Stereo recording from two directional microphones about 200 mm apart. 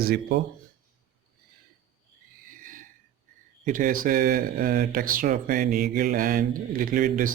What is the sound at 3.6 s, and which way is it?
Speech, 40° right (ahead or behind).